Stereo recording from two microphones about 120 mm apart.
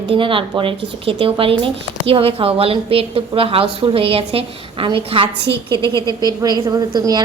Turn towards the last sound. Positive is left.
turn(degrees=-35)  # may be behind; listen again after turning